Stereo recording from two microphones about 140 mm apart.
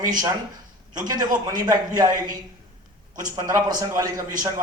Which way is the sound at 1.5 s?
30° right (ahead or behind).